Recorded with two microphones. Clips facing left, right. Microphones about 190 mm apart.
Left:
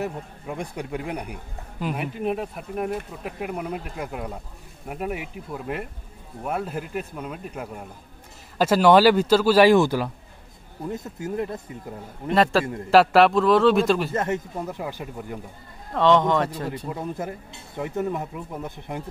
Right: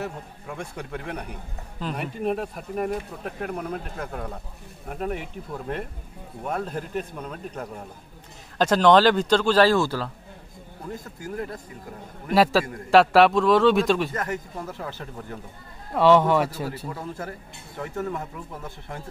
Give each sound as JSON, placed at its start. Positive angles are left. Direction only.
{"t": 0.0, "sound": "speech", "side_deg": 15}
{"t": 12.4, "sound": "a man's voice", "side_deg": -5}
{"t": 14.1, "sound": "speech", "side_deg": 25}
{"t": 15.9, "sound": "speech", "side_deg": -10}
{"t": 16.6, "sound": "speech", "side_deg": 20}